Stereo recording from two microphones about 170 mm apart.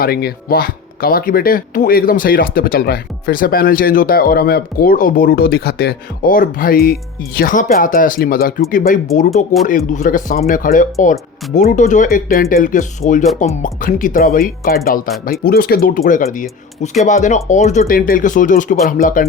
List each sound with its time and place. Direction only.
0.0 s speech: 65° left (ahead or behind)
9.6 s speech: 50° left (ahead or behind)